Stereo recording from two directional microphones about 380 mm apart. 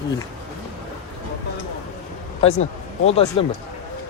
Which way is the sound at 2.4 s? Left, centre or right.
Centre.